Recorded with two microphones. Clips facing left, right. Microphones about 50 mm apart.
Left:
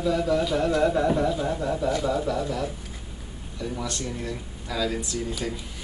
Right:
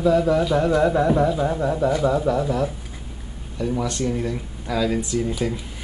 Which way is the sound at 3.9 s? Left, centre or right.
Right.